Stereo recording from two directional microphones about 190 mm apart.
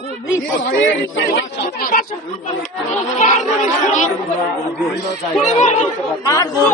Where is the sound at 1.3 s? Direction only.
55° left (ahead or behind).